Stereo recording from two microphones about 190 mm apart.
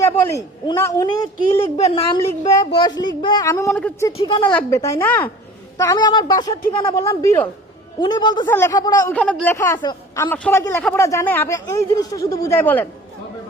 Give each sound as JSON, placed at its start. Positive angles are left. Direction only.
{"t": 0.0, "sound": "speech", "side_deg": 15}
{"t": 1.7, "sound": "a woman's voice", "side_deg": 30}
{"t": 2.5, "sound": "a woman's voice", "side_deg": 20}
{"t": 4.2, "sound": "a woman's voice", "side_deg": 25}
{"t": 8.4, "sound": "speech", "side_deg": 15}
{"t": 9.1, "sound": "speech", "side_deg": 5}
{"t": 10.2, "sound": "speech", "side_deg": 10}